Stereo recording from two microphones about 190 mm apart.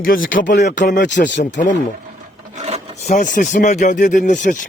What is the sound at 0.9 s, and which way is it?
Speech, 65° left (ahead or behind).